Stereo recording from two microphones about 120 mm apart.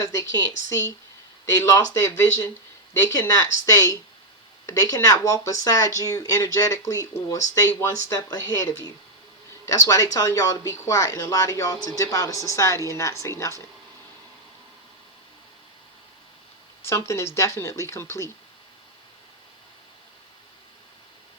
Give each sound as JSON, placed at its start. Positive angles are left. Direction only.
{"t": 0.7, "sound": "speech", "side_deg": 25}
{"t": 16.8, "sound": "speech", "side_deg": 25}